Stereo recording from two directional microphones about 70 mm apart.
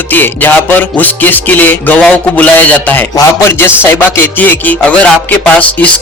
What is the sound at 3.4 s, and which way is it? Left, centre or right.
A man's voice, left.